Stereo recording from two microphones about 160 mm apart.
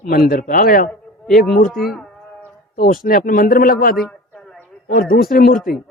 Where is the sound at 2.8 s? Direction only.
70° left (ahead or behind).